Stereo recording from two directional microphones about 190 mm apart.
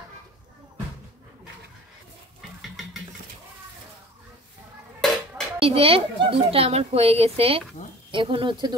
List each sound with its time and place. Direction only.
2.6 s a sound: centre (ahead or behind)
5.0 s dishes: 5° left (ahead or behind)
5.6 s speech: 30° right (ahead or behind)